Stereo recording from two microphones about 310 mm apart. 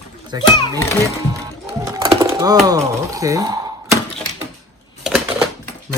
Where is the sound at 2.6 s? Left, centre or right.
Centre.